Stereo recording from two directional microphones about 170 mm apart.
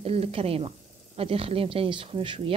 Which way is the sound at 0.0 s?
35° right (ahead or behind).